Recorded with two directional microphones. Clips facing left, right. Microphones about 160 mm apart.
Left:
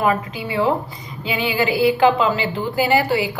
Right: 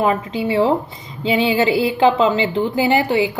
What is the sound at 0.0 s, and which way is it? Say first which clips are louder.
A woman's voice: right 2 dB; 20° right (ahead or behind).